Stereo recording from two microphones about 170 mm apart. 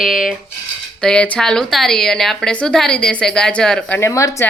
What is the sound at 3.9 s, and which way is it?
Speech, 15° left (ahead or behind).